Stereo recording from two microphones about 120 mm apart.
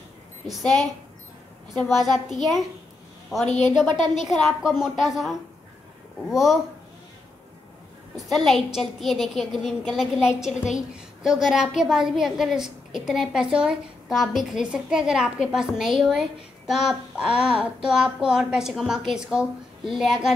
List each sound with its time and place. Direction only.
0.5 s a woman's voice: centre (ahead or behind)
3.8 s speech: 40° right (ahead or behind)
4.2 s a woman's voice: centre (ahead or behind)
8.3 s a woman's voice: centre (ahead or behind)